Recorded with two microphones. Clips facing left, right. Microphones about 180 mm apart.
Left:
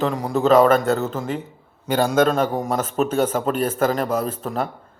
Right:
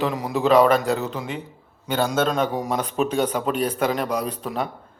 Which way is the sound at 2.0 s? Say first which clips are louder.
Left 4 dB; 5° left (ahead or behind).